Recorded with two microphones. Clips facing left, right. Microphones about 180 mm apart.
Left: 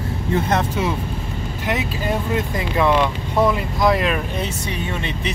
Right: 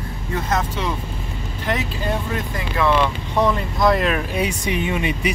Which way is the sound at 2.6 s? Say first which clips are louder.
Even; 20° left (ahead or behind).